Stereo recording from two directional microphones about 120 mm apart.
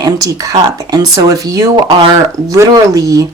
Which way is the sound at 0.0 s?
30° right (ahead or behind).